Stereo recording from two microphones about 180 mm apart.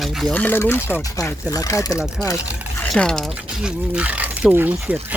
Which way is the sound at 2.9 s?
5° left (ahead or behind).